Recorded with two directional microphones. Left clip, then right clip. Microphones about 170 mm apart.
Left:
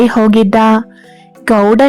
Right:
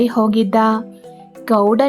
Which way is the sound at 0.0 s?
30° left (ahead or behind).